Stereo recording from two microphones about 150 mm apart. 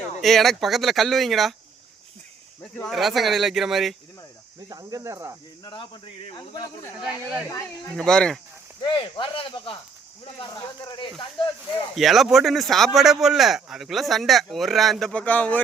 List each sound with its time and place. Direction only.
0.2 s speech: centre (ahead or behind)
2.6 s speech: 10° left (ahead or behind)
4.7 s speech: 25° right (ahead or behind)
5.6 s speech: 30° left (ahead or behind)
7.0 s speech: 5° right (ahead or behind)
8.8 s speech: 30° left (ahead or behind)
11.9 s speech: centre (ahead or behind)